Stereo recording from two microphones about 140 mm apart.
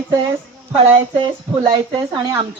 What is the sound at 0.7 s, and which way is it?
Speech, 40° right (ahead or behind).